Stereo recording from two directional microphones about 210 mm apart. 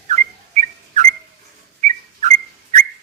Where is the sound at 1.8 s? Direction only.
35° right (ahead or behind).